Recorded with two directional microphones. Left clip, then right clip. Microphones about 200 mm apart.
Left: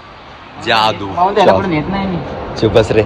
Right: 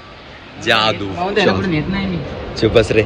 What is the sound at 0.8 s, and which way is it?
Speech, 20° right (ahead or behind).